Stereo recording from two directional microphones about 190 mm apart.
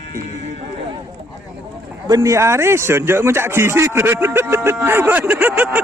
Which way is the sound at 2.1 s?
15° right (ahead or behind).